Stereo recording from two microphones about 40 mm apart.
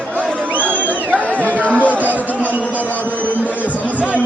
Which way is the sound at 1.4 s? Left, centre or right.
Right.